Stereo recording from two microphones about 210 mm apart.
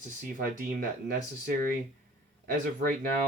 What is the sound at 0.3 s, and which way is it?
Speech, 40° right (ahead or behind).